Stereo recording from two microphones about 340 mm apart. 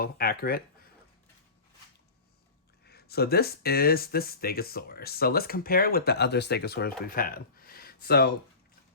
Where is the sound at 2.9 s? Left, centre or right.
Left.